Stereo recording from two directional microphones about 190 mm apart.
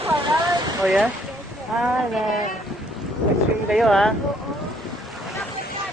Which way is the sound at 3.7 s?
Centre (ahead or behind).